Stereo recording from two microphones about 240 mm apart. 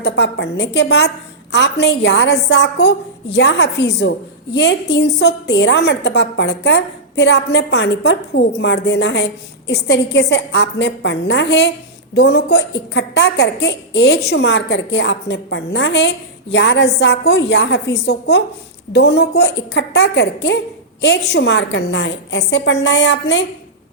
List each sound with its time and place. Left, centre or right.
0.0 s a woman's voice: left